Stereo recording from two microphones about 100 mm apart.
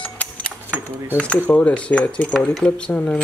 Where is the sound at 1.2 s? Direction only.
15° left (ahead or behind).